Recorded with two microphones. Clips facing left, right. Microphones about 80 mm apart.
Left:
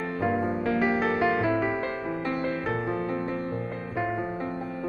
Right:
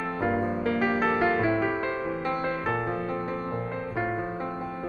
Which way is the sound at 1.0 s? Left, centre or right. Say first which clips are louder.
Even; right.